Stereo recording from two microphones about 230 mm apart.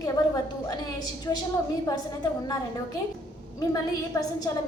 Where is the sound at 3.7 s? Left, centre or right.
Centre.